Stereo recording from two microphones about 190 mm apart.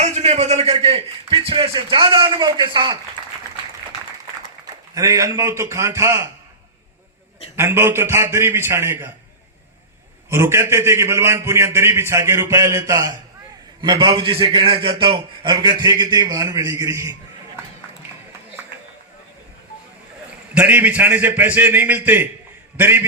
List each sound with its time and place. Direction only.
0.0 s a man's voice: 35° right (ahead or behind)
4.9 s a man's voice: 15° right (ahead or behind)
7.5 s a man's voice: 10° right (ahead or behind)
10.2 s a man's voice: 15° right (ahead or behind)
20.5 s a man's voice: 10° right (ahead or behind)